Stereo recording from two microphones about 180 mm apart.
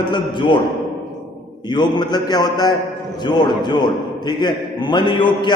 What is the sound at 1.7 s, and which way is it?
A man's voice, 25° left (ahead or behind).